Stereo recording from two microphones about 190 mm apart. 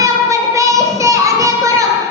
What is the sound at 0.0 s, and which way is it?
Child singing, 15° right (ahead or behind).